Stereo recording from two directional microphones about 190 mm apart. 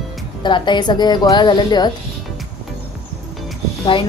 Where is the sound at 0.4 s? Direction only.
25° left (ahead or behind).